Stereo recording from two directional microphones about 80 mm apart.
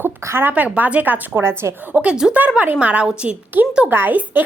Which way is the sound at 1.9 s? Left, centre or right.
Centre.